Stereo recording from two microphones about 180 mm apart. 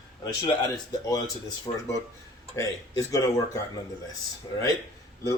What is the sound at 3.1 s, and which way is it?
Speech, 20° left (ahead or behind).